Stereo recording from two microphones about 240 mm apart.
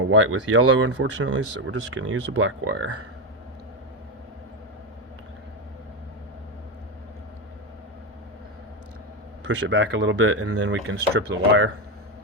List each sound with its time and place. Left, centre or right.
0.1 s speech: right
0.9 s speech: right
1.6 s speech: right
9.6 s speech: right